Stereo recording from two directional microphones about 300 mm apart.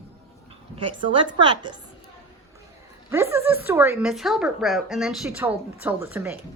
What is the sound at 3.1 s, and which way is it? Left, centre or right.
A woman's voice, centre.